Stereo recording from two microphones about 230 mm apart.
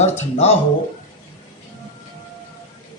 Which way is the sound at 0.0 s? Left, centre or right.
Left.